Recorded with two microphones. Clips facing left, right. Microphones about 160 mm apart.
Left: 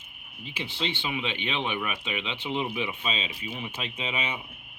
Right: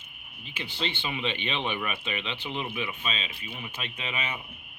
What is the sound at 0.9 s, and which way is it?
Speech, 10° left (ahead or behind).